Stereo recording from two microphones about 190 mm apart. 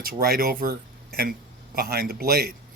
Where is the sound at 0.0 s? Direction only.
50° right (ahead or behind).